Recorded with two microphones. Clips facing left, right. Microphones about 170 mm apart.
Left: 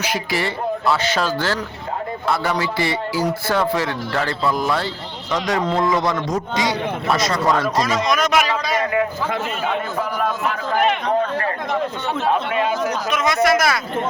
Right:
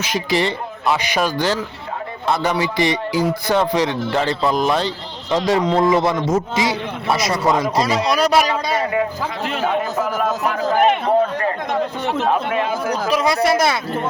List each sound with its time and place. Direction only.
0.1 s a man's voice: 20° right (ahead or behind)
7.8 s speech: 30° right (ahead or behind)
9.4 s a man's voice: 80° right
10.4 s speech: 40° right (ahead or behind)
12.9 s speech: 35° right (ahead or behind)